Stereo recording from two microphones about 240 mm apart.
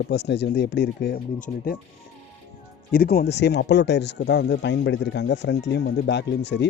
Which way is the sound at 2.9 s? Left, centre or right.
Left.